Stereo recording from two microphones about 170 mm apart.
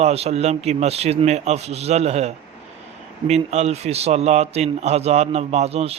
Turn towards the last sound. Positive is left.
turn(degrees=-35)  # may be behind; listen again after turning